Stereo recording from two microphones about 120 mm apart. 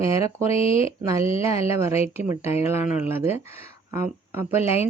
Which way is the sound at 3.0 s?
15° right (ahead or behind).